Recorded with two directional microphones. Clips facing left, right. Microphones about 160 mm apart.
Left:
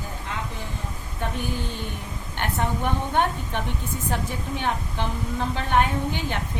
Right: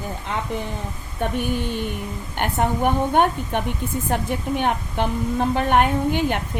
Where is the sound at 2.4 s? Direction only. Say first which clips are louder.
Right 5 dB; 55° right (ahead or behind).